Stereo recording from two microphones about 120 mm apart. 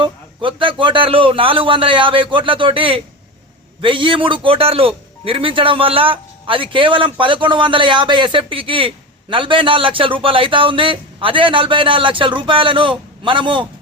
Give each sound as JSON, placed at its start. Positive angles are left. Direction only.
{"t": 0.0, "sound": "a man's voice", "side_deg": -45}